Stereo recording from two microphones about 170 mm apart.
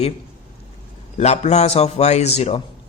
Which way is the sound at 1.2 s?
40° left (ahead or behind).